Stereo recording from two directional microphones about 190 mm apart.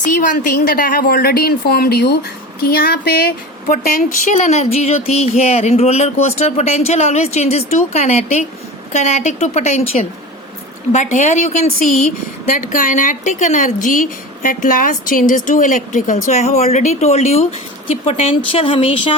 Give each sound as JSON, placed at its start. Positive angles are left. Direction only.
{"t": 0.1, "sound": "a woman's voice", "side_deg": 45}
{"t": 10.9, "sound": "a woman's voice", "side_deg": 40}